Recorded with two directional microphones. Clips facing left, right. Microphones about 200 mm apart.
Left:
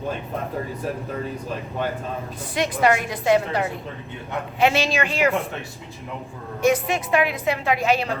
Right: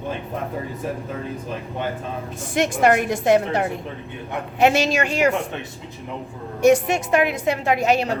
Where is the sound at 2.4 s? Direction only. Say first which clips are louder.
Right 3 dB; 50° right (ahead or behind).